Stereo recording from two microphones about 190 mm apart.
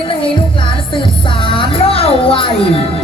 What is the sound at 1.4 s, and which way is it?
Music, 25° left (ahead or behind).